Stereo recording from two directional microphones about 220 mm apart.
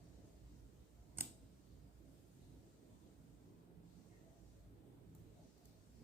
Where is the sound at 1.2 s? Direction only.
10° right (ahead or behind).